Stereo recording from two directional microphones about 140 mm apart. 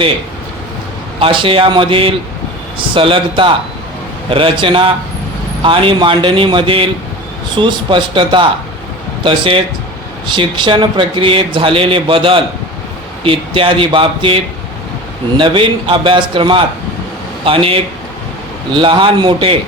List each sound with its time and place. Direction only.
1.2 s speech: 40° right (ahead or behind)